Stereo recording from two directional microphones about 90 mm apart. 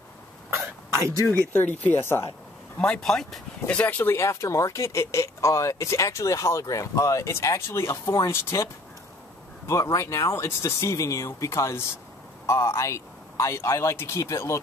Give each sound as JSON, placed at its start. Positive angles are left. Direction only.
{"t": 1.2, "sound": "speech", "side_deg": 20}
{"t": 2.8, "sound": "speech", "side_deg": 10}
{"t": 3.6, "sound": "speech", "side_deg": 20}
{"t": 4.2, "sound": "speech", "side_deg": 35}
{"t": 9.7, "sound": "speech", "side_deg": 35}